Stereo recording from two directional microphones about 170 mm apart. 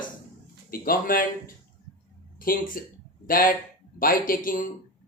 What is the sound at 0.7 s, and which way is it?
Speech, 55° left (ahead or behind).